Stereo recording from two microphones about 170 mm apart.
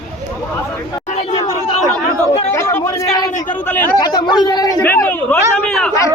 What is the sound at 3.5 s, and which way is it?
Speech, 10° left (ahead or behind).